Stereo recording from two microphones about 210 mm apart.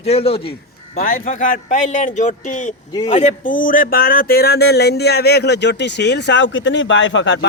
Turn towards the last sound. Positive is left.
turn(degrees=60)  # may be behind; listen again after turning